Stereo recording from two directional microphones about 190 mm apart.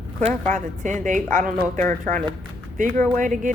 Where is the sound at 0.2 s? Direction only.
35° right (ahead or behind).